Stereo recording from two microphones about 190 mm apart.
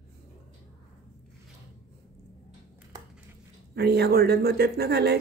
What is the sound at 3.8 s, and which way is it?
Speech, 55° right (ahead or behind).